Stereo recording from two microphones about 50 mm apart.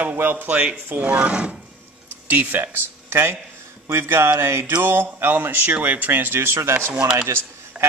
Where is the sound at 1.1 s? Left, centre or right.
Right.